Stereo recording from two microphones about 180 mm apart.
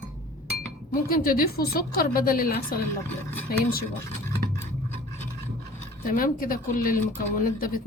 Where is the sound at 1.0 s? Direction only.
55° left (ahead or behind).